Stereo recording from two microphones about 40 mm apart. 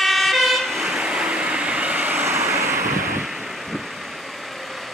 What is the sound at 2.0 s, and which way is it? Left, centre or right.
Vehicle, right.